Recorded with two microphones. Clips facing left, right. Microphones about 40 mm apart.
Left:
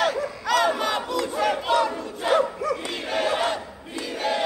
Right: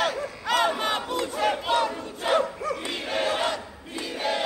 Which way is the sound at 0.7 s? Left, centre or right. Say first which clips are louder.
Left 2 dB; right.